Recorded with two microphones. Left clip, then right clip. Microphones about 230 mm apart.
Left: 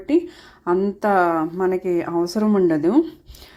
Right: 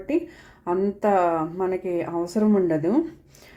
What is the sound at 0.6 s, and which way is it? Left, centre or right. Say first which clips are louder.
Speech: left 3 dB; left.